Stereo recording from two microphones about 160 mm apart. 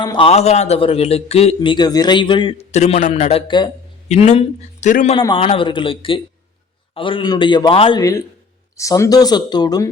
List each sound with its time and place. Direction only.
0.0 s speech: 25° left (ahead or behind)
0.3 s a man's voice: 40° left (ahead or behind)
4.1 s speech: 40° left (ahead or behind)
5.1 s a man's voice: 30° left (ahead or behind)
8.8 s speech: 20° left (ahead or behind)